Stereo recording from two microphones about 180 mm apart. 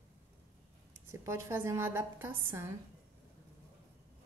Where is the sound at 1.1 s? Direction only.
15° right (ahead or behind).